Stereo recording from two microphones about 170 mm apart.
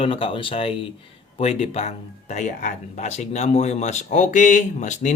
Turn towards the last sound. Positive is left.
turn(degrees=45)  # may be behind; listen again after turning